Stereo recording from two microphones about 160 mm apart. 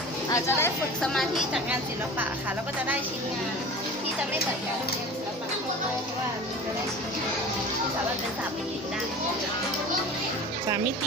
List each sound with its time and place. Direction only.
0.3 s speech: 15° left (ahead or behind)
1.0 s a woman's voice: centre (ahead or behind)